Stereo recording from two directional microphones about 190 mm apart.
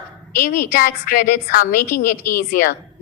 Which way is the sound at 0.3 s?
45° left (ahead or behind).